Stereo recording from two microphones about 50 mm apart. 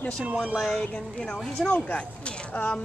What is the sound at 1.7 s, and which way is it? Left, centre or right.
Speech, left.